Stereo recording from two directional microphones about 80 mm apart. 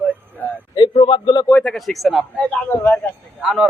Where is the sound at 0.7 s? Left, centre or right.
Left.